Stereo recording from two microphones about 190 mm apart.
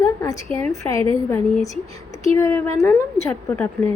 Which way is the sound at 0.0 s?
15° left (ahead or behind).